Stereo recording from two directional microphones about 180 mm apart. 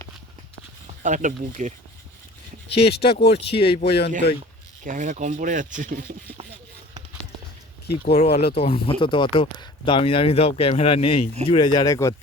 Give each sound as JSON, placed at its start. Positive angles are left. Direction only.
{"t": 1.0, "sound": "speech", "side_deg": -45}
{"t": 2.7, "sound": "speech", "side_deg": 35}
{"t": 4.2, "sound": "speech", "side_deg": 65}
{"t": 4.8, "sound": "speech", "side_deg": -45}
{"t": 8.0, "sound": "speech", "side_deg": 40}
{"t": 8.3, "sound": "speech", "side_deg": 65}
{"t": 8.5, "sound": "speech", "side_deg": 30}